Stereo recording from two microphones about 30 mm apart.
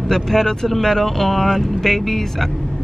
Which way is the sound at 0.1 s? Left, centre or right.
Centre.